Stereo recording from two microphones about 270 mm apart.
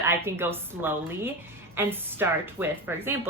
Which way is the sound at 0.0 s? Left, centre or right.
Centre.